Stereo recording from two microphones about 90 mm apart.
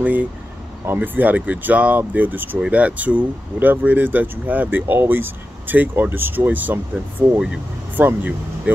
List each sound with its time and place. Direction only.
0.0 s speech: 20° right (ahead or behind)